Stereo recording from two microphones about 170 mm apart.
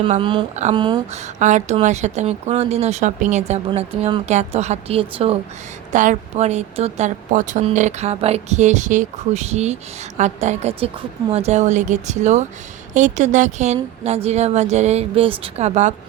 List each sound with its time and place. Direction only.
0.0 s speech: 30° right (ahead or behind)
0.5 s a woman's voice: 45° right (ahead or behind)
0.8 s speech: 25° right (ahead or behind)
1.1 s a woman's voice: 45° right (ahead or behind)
5.9 s a woman's voice: 45° right (ahead or behind)